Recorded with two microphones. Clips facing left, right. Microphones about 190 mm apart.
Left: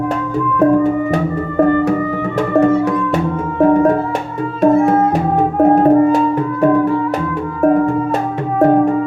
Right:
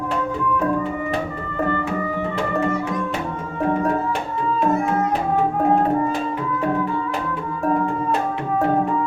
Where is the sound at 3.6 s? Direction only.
50° left (ahead or behind).